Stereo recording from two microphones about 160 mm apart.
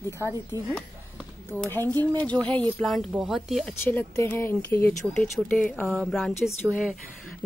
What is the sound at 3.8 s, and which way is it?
A woman's voice, 15° left (ahead or behind).